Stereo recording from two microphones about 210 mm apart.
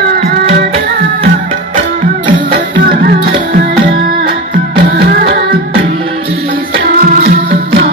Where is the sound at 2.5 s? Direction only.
45° right (ahead or behind).